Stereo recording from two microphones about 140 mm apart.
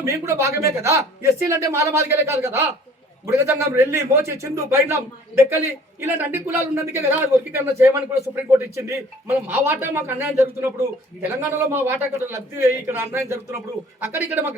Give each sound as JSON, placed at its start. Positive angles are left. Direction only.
{"t": 0.0, "sound": "a man's voice", "side_deg": -20}